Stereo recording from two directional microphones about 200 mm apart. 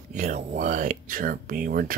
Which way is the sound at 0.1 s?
35° right (ahead or behind).